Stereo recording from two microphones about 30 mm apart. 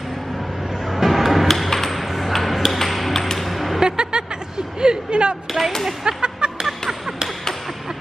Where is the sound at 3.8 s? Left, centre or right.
Right.